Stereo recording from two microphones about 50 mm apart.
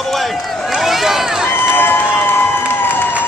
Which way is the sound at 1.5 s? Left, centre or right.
Left.